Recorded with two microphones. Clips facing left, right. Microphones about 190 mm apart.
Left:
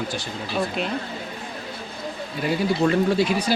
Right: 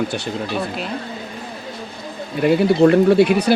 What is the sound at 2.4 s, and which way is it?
A man's voice, 60° right (ahead or behind).